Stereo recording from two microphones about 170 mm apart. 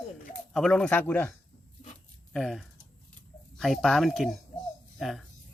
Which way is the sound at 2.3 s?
Centre (ahead or behind).